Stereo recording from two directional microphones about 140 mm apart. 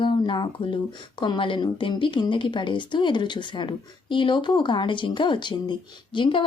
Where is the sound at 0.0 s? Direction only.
35° left (ahead or behind).